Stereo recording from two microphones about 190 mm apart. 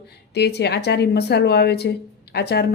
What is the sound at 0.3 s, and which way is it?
A woman's voice, 60° left (ahead or behind).